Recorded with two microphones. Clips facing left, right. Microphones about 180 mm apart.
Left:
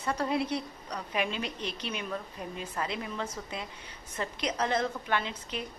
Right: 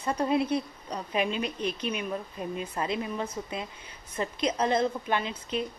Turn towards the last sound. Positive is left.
turn(degrees=-20)  # may be behind; listen again after turning